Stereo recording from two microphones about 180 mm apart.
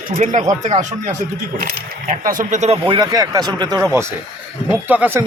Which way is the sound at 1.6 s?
50° right (ahead or behind).